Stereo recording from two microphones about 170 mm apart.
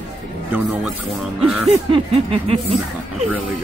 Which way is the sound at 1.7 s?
35° right (ahead or behind).